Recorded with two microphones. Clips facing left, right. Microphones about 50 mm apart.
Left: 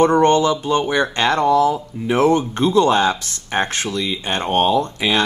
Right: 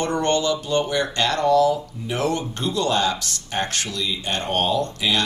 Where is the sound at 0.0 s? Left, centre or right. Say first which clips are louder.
Left 8 dB; left.